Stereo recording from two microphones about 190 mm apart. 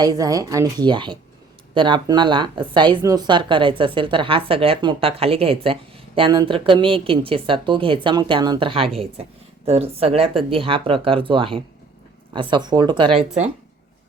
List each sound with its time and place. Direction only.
0.0 s speech: 20° right (ahead or behind)